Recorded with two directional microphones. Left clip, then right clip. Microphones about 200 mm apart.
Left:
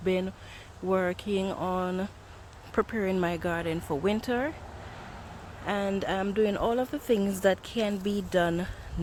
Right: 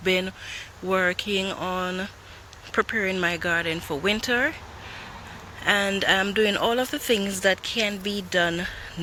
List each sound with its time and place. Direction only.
0.0 s speech: 5° left (ahead or behind)
5.6 s speech: 5° left (ahead or behind)
7.2 s speech: 20° left (ahead or behind)